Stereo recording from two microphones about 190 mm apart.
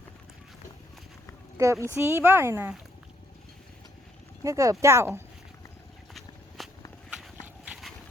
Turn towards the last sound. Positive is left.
turn(degrees=-5)  # may be behind; listen again after turning